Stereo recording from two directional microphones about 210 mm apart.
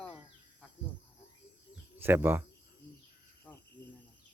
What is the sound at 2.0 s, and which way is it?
Speech, 10° right (ahead or behind).